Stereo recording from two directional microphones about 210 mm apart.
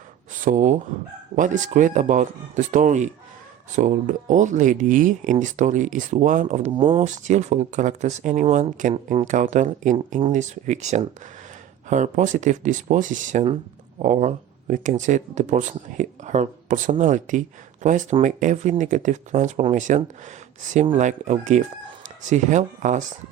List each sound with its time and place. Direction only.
0.3 s speech: 40° right (ahead or behind)
6.7 s speech: 25° right (ahead or behind)
21.0 s speech: 35° right (ahead or behind)